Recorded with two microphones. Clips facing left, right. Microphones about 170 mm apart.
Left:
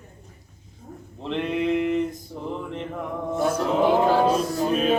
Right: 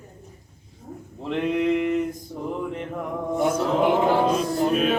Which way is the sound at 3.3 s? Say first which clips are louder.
Right 1 dB; 15° right (ahead or behind).